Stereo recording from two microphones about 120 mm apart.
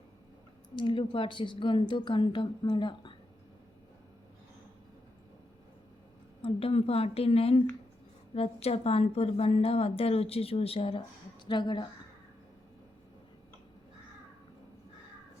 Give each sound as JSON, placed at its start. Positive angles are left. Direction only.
{"t": 0.8, "sound": "a woman's voice", "side_deg": 45}
{"t": 6.4, "sound": "a woman's voice", "side_deg": 50}
{"t": 11.4, "sound": "a woman's voice", "side_deg": 40}